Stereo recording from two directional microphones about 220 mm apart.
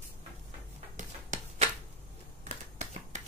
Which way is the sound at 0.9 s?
35° right (ahead or behind).